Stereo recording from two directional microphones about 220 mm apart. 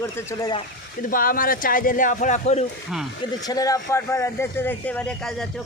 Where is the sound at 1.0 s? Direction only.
40° left (ahead or behind).